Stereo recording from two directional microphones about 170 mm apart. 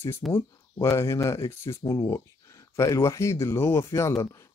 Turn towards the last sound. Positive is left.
turn(degrees=15)  # may be behind; listen again after turning